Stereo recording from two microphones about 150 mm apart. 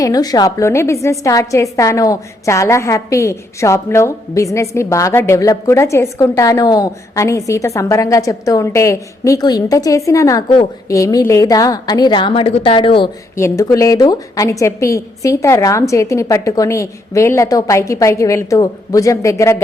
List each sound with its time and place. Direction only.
0.0 s a woman's voice: 25° left (ahead or behind)
13.3 s a woman's voice: 20° left (ahead or behind)